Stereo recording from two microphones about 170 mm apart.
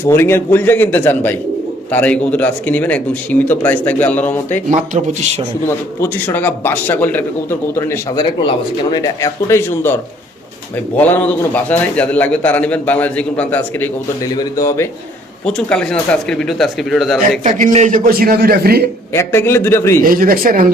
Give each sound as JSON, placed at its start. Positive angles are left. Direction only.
{"t": 0.0, "sound": "speech", "side_deg": 15}
{"t": 5.6, "sound": "speech", "side_deg": 10}
{"t": 15.4, "sound": "speech", "side_deg": 5}
{"t": 17.4, "sound": "a man's voice", "side_deg": -45}
{"t": 19.1, "sound": "speech", "side_deg": 15}
{"t": 20.0, "sound": "a man's voice", "side_deg": -55}